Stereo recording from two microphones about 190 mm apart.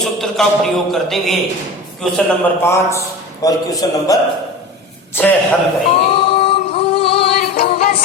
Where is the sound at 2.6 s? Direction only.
15° left (ahead or behind).